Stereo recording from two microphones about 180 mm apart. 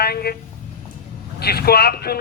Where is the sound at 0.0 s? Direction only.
60° left (ahead or behind).